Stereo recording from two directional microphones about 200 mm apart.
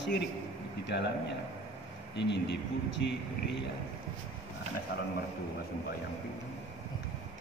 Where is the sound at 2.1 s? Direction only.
60° left (ahead or behind).